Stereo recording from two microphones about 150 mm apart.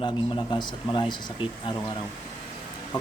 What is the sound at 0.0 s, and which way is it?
A man's voice, 30° left (ahead or behind).